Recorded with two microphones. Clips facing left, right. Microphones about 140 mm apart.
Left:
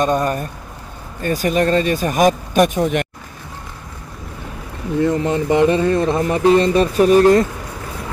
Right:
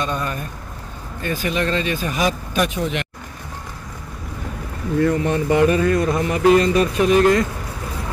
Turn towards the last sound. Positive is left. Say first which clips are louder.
# left 4 dB
turn(degrees=35)  # may be behind; listen again after turning